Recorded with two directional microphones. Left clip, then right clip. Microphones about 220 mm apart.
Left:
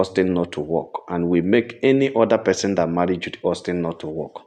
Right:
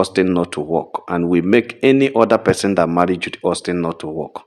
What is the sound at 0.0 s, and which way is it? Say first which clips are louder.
Speech: right 3 dB; 25° right (ahead or behind).